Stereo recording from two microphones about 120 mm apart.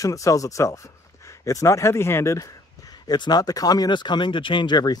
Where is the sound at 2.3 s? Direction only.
30° left (ahead or behind).